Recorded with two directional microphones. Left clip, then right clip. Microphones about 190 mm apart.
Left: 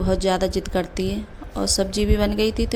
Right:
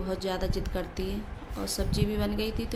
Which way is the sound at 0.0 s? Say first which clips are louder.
Left 11 dB; 40° left (ahead or behind).